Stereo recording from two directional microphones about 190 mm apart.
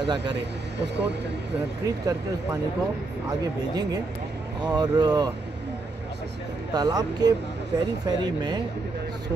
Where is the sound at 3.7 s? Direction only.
20° right (ahead or behind).